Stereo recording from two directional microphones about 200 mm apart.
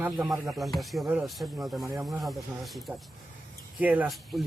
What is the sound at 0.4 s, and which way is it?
A man's voice, centre (ahead or behind).